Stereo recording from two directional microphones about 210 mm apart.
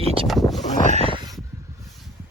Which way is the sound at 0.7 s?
35° left (ahead or behind).